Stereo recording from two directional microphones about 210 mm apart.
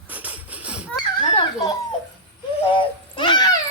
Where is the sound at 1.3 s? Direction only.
25° left (ahead or behind).